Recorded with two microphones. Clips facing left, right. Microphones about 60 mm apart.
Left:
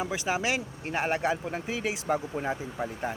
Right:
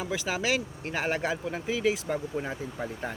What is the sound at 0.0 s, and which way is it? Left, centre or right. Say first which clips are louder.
Speech: left 1 dB; centre.